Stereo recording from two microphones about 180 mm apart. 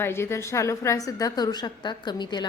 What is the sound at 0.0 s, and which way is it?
A woman's voice, 15° left (ahead or behind).